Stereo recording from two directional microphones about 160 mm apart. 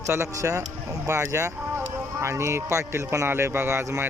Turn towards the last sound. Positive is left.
turn(degrees=-15)  # may be behind; listen again after turning